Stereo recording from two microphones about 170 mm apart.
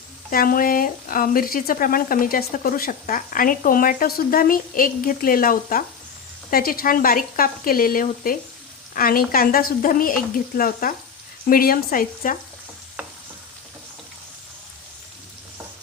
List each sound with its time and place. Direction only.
0.3 s speech: 55° left (ahead or behind)
13.0 s stir: 5° right (ahead or behind)